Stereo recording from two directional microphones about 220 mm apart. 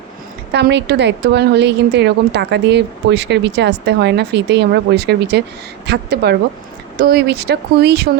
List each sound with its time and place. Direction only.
0.5 s a woman's voice: 50° right (ahead or behind)